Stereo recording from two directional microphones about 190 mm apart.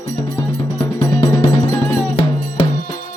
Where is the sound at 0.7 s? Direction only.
15° left (ahead or behind).